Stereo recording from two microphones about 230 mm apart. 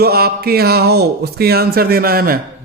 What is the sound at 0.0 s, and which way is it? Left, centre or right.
Speech, right.